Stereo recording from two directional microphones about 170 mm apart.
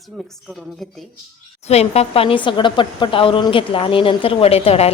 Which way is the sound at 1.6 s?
40° left (ahead or behind).